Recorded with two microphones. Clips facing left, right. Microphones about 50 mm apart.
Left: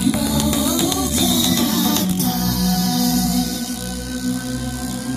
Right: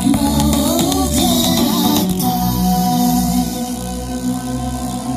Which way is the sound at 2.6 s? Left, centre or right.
Right.